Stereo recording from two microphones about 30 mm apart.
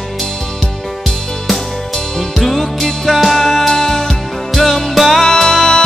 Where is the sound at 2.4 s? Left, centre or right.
Centre.